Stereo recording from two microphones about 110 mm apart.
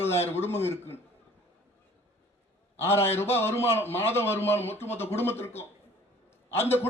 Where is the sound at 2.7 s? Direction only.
20° left (ahead or behind).